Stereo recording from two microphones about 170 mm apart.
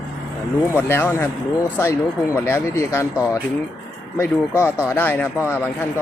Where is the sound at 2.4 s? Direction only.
15° left (ahead or behind).